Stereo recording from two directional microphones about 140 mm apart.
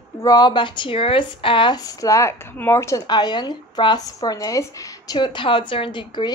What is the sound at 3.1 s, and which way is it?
Speech, 30° left (ahead or behind).